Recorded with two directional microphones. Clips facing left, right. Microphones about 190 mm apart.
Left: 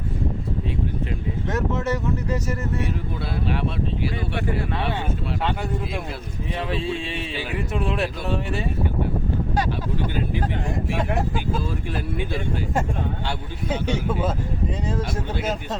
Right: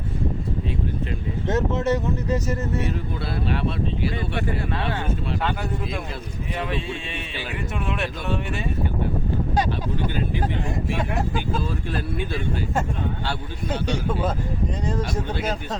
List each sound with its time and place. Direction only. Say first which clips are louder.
1.5 s speech: right 3 dB; 20° right (ahead or behind)
3.5 s speech: right 1 dB; 10° left (ahead or behind)
6.7 s speech: left 3 dB; 30° left (ahead or behind)
11.3 s speech: even; 10° left (ahead or behind)